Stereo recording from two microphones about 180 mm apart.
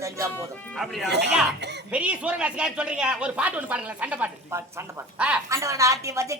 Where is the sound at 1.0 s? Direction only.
70° right (ahead or behind).